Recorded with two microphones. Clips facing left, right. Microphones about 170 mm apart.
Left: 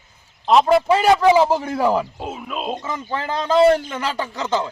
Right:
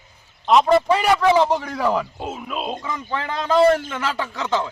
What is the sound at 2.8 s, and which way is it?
Speech, 25° left (ahead or behind).